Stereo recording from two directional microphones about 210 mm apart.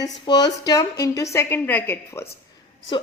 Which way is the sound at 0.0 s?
20° left (ahead or behind).